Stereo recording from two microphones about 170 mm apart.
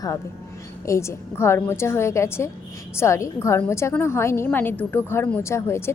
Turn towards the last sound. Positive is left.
turn(degrees=15)  # may be behind; listen again after turning